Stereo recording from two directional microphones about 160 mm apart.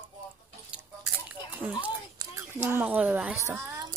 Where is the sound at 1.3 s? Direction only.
10° right (ahead or behind).